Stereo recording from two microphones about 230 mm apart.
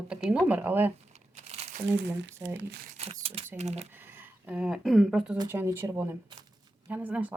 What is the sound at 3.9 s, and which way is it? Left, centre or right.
Speech, centre.